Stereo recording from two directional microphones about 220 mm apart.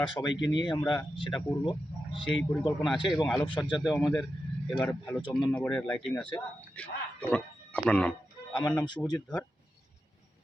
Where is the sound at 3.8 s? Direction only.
Centre (ahead or behind).